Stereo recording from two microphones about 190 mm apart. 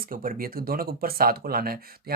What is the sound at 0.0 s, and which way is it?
Speech, 50° right (ahead or behind).